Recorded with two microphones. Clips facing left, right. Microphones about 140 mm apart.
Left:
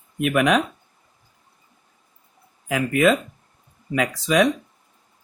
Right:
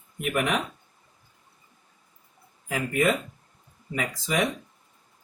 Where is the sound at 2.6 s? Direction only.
85° left.